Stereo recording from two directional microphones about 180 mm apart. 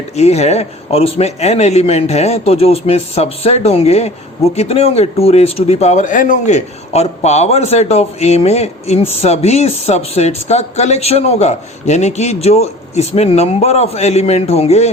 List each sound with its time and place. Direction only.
0.2 s speech: 35° left (ahead or behind)